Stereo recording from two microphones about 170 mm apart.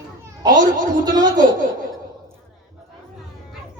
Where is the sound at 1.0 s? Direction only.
25° right (ahead or behind).